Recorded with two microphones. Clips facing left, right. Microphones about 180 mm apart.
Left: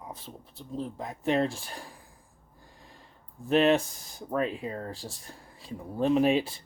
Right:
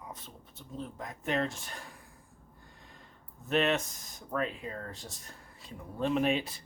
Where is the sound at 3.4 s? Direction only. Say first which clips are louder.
Left 6 dB; 30° left (ahead or behind).